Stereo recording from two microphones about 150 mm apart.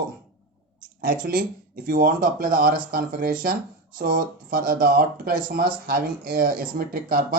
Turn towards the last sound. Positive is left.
turn(degrees=-75)  # may be behind; listen again after turning